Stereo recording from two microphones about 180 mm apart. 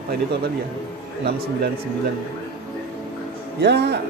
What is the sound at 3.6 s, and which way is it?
Speech, 70° right (ahead or behind).